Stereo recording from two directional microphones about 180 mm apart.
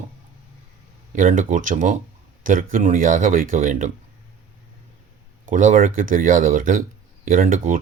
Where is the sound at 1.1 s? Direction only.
45° right (ahead or behind).